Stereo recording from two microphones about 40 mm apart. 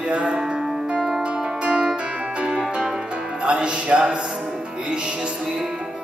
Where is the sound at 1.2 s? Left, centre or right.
Right.